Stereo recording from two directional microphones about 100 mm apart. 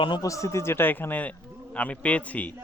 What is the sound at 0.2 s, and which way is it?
A man's voice, 30° left (ahead or behind).